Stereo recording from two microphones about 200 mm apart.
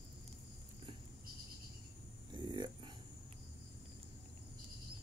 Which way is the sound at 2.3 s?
25° right (ahead or behind).